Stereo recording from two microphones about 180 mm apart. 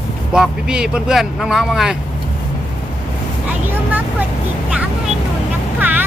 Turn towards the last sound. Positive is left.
turn(degrees=-10)  # may be behind; listen again after turning